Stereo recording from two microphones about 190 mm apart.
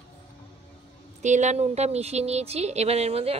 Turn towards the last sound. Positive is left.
turn(degrees=-30)  # may be behind; listen again after turning